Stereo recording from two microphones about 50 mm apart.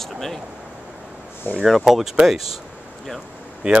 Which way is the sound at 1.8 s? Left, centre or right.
Centre.